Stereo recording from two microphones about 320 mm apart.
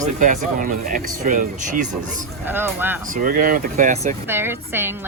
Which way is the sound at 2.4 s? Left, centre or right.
Centre.